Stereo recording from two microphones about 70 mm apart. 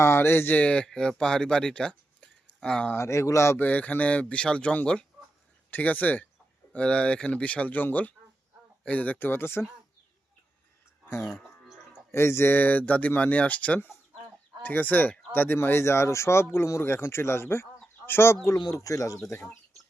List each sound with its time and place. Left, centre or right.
0.0 s speech: left; by 2.9 s centre
2.9 s speech: left
3.6 s speech: left
9.1 s speech: left
11.0 s livestock: left
12.1 s speech: left
18.7 s speech: left